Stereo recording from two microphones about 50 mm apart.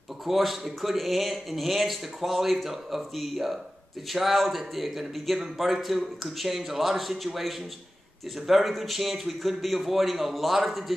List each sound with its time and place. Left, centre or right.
0.3 s speech: centre